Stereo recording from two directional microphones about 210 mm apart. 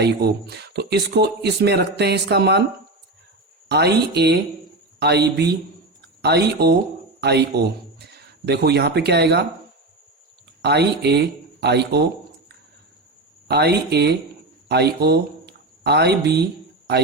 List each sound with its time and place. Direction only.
0.0 s speech: 50° right (ahead or behind)
3.7 s speech: 50° right (ahead or behind)
10.6 s speech: 50° right (ahead or behind)
13.5 s speech: 50° right (ahead or behind)